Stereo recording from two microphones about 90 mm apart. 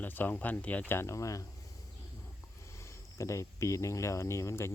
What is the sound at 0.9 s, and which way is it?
Speech, 30° left (ahead or behind).